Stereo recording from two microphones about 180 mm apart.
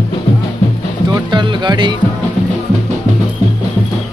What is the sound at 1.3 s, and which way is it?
Music, 25° right (ahead or behind).